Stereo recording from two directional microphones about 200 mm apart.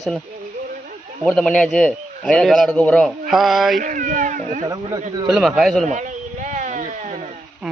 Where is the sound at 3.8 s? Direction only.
40° right (ahead or behind).